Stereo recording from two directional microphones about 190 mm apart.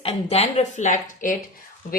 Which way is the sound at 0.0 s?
35° left (ahead or behind).